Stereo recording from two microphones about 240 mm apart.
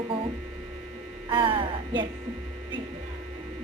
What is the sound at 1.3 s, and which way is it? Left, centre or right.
Speech, right.